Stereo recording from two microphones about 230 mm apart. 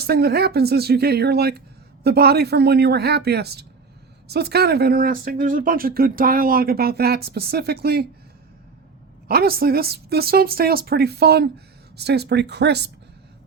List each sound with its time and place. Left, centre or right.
0.0 s speech: right
9.2 s speech: right